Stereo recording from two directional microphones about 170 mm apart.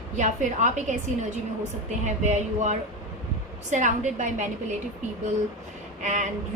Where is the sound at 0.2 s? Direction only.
45° right (ahead or behind).